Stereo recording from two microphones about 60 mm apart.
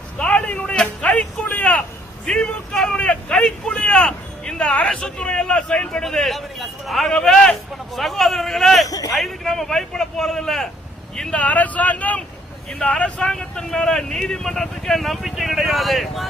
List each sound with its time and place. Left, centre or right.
0.2 s a sound: centre
2.2 s a man's voice: centre
8.9 s a man's voice: left
9.1 s speech: centre
11.3 s speech: left; by 16.2 s centre